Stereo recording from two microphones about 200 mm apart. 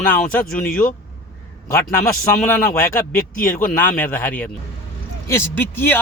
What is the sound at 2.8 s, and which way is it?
Speech, 45° left (ahead or behind).